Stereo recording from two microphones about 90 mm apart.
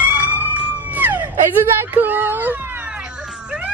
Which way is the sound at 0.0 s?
20° right (ahead or behind).